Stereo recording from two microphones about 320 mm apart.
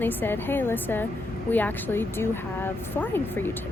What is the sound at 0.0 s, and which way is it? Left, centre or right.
Speech, centre.